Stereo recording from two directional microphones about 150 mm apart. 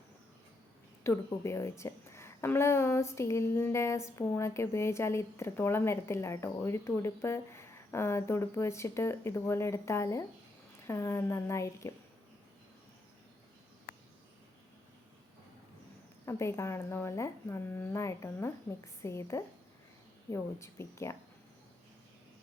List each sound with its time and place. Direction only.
1.0 s a woman's voice: 20° left (ahead or behind)
16.2 s a woman's voice: 20° left (ahead or behind)